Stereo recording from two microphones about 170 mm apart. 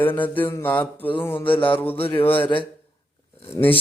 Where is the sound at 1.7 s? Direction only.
10° left (ahead or behind).